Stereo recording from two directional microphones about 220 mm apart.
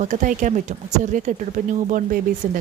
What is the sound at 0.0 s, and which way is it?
A woman's voice, 35° right (ahead or behind).